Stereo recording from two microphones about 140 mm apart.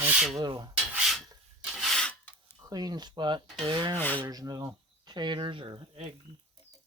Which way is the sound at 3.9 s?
10° left (ahead or behind).